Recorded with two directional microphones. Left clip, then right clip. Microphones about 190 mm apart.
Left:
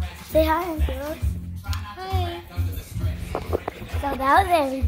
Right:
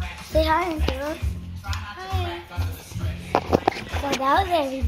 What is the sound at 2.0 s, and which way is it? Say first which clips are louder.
Music: left 3 dB; 20° left (ahead or behind).